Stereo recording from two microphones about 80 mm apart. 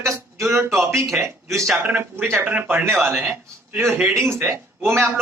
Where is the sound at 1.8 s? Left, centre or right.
Right.